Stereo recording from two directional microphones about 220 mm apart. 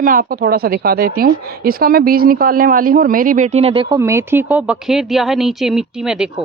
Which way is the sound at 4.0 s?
10° right (ahead or behind).